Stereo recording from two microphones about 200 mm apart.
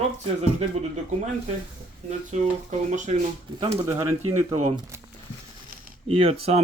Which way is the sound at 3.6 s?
20° right (ahead or behind).